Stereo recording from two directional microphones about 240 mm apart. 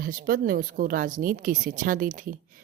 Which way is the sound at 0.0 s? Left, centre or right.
Right.